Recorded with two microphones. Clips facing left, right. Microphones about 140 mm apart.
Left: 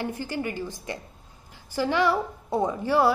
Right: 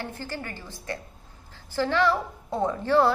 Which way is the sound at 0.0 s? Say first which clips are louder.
Left 5 dB; 15° left (ahead or behind).